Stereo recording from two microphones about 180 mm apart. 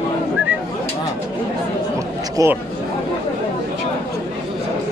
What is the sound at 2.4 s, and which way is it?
Speech, 20° right (ahead or behind).